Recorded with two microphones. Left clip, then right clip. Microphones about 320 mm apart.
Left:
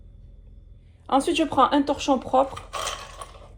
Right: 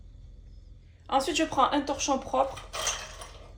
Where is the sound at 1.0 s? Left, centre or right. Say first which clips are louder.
Left 5 dB; left.